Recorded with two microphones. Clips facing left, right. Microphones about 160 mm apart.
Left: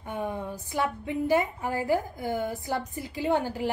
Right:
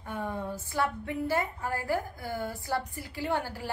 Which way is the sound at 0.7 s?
15° left (ahead or behind).